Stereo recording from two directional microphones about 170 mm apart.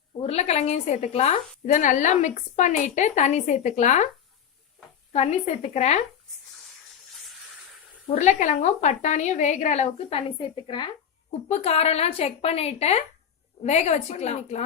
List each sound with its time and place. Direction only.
0.2 s a woman's voice: 40° left (ahead or behind)
5.1 s a woman's voice: 40° left (ahead or behind)
8.1 s a woman's voice: 45° left (ahead or behind)
11.3 s a woman's voice: 40° left (ahead or behind)